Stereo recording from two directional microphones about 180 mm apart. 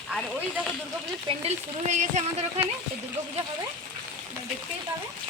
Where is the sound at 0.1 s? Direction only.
Centre (ahead or behind).